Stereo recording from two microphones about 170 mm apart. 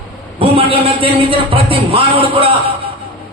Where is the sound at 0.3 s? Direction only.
35° right (ahead or behind).